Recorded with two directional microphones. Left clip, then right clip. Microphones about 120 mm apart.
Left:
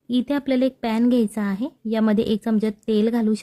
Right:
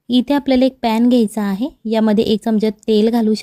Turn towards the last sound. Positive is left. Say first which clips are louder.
# right 7 dB
turn(degrees=-35)  # may be behind; listen again after turning